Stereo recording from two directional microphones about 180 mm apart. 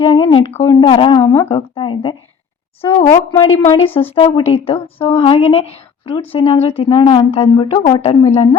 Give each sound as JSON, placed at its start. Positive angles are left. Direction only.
{"t": 0.0, "sound": "a woman's voice", "side_deg": 25}